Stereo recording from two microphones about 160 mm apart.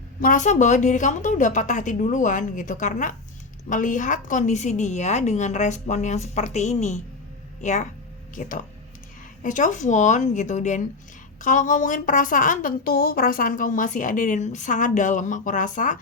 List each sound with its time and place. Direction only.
0.2 s speech: 55° left (ahead or behind)